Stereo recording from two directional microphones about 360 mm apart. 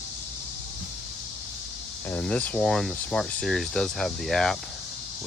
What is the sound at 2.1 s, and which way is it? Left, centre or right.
Speech, centre.